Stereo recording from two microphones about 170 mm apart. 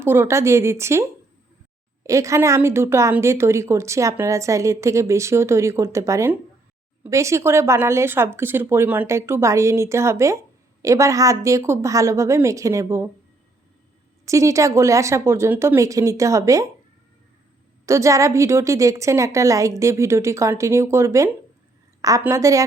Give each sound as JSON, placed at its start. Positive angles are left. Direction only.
{"t": 0.0, "sound": "a woman's voice", "side_deg": -15}
{"t": 2.0, "sound": "a woman's voice", "side_deg": -20}
{"t": 14.3, "sound": "a woman's voice", "side_deg": -20}
{"t": 17.8, "sound": "a woman's voice", "side_deg": -15}